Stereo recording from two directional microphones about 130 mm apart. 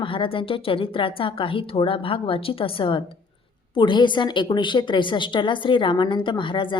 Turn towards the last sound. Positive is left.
turn(degrees=40)  # may be behind; listen again after turning